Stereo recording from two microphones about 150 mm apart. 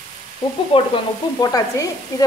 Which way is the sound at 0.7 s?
30° left (ahead or behind).